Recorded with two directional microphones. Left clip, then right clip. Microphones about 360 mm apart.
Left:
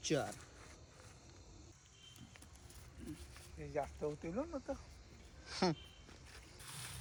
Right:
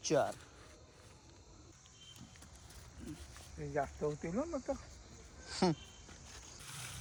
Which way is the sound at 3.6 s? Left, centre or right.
Right.